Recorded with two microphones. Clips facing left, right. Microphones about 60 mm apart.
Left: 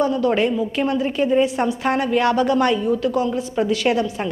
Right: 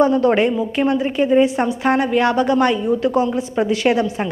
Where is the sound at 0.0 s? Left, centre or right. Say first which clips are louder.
Right 4 dB; right.